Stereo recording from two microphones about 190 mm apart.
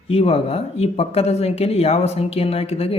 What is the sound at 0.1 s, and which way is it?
Speech, 30° left (ahead or behind).